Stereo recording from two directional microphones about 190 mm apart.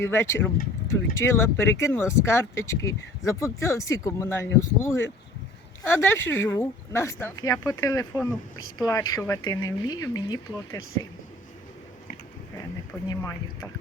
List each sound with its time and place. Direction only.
0.0 s speech: 15° left (ahead or behind)
13.1 s speech: 15° left (ahead or behind)